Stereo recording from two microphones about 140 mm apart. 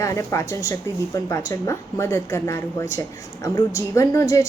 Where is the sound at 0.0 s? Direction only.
20° left (ahead or behind).